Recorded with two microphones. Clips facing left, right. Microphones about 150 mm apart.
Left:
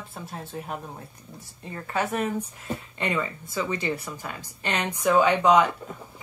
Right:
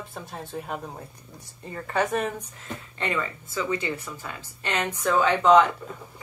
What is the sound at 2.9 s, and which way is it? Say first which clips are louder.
Speech: even; 15° left (ahead or behind).